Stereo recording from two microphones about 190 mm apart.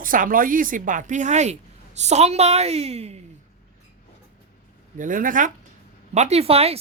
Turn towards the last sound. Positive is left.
turn(degrees=-30)  # may be behind; listen again after turning